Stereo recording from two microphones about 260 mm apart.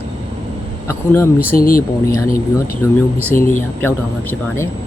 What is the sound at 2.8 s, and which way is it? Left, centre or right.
Speech, centre.